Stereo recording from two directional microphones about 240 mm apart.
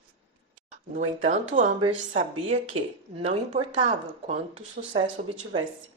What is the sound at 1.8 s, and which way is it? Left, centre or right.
Speech, right.